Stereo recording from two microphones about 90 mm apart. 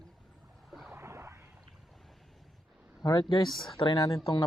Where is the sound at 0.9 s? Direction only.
30° right (ahead or behind).